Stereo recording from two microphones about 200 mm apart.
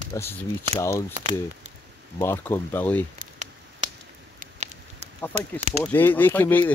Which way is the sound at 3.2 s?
40° right (ahead or behind).